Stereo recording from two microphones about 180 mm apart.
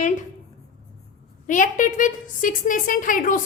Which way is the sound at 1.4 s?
45° left (ahead or behind).